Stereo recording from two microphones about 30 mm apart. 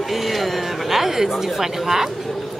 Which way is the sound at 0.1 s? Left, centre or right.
Centre.